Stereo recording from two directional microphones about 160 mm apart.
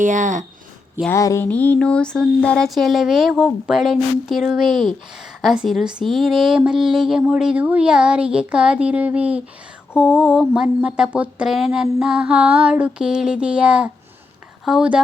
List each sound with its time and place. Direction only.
0.0 s speech: 50° right (ahead or behind)
1.1 s speech: 20° left (ahead or behind); by 15.0 s 5° right (ahead or behind)